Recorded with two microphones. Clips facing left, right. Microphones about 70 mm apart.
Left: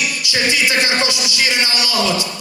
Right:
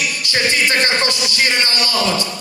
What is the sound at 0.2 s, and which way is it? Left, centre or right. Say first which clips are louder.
A man's voice: right 1 dB; right.